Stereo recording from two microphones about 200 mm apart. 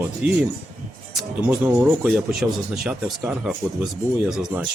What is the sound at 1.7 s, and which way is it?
A man's voice, 10° right (ahead or behind).